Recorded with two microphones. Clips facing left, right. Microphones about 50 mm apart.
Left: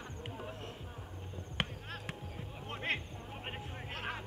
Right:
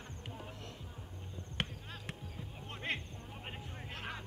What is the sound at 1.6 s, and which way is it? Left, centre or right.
Basketball bounce, centre.